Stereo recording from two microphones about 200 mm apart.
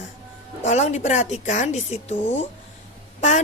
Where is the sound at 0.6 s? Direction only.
35° left (ahead or behind).